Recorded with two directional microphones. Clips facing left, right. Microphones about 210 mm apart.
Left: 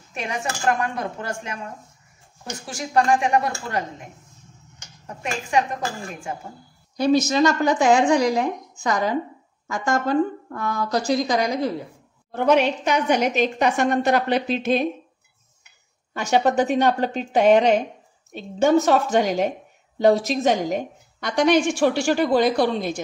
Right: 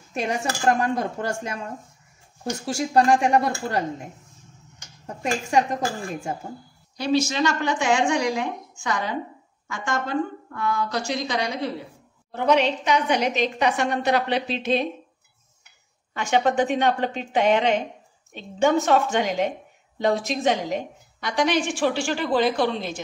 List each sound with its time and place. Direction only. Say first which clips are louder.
0.7 s speech: right 2 dB; 35° right (ahead or behind)
2.9 s speech: even; 35° right (ahead or behind)
5.0 s speech: right 3 dB; 35° right (ahead or behind)
7.0 s a woman's voice: left 4 dB; 45° left (ahead or behind)
16.1 s a woman's voice: left 2 dB; 40° left (ahead or behind)